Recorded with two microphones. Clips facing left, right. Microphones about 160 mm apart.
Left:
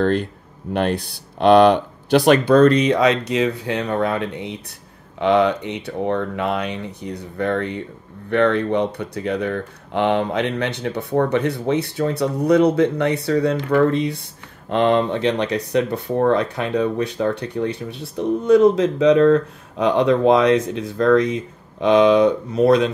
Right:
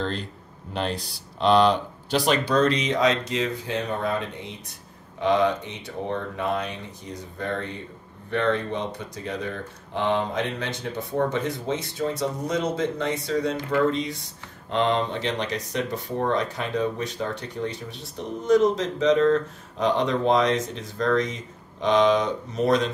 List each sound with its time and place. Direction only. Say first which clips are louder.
0.0 s speech: left 10 dB; 55° left (ahead or behind)
5.2 s speech: left 5 dB; 65° left (ahead or behind)